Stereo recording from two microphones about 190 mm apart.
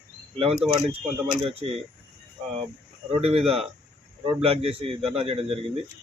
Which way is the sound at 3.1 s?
30° right (ahead or behind).